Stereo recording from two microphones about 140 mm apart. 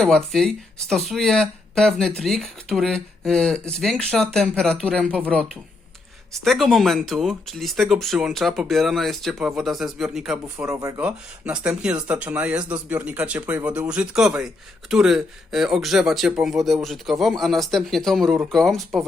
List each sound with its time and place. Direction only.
0.0 s speech: 5° left (ahead or behind)
6.4 s speech: centre (ahead or behind)
10.6 s speech: 20° right (ahead or behind)
11.0 s speech: 10° right (ahead or behind)